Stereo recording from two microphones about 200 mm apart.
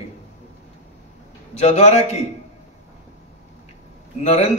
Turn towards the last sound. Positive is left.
turn(degrees=35)  # may be behind; listen again after turning